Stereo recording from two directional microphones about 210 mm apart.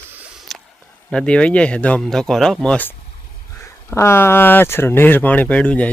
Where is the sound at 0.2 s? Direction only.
Centre (ahead or behind).